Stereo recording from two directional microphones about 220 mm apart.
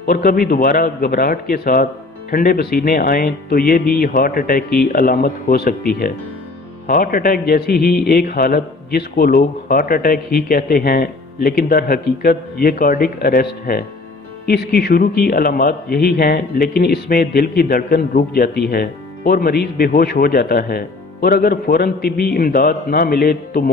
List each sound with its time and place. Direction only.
0.0 s speech: 45° left (ahead or behind)